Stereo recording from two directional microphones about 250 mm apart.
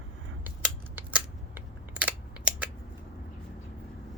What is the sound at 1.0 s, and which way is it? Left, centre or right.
Scissors, centre.